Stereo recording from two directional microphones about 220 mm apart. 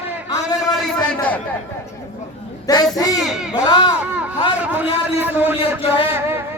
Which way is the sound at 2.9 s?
15° left (ahead or behind).